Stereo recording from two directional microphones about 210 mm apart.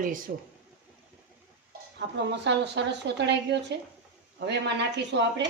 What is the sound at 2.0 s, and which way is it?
A woman's voice, 55° right (ahead or behind).